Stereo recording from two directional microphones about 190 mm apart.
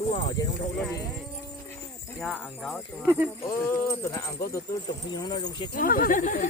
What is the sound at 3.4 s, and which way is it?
Speech, 15° left (ahead or behind).